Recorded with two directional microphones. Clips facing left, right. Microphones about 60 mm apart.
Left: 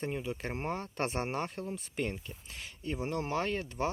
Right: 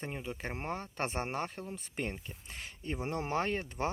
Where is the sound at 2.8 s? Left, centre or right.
Right.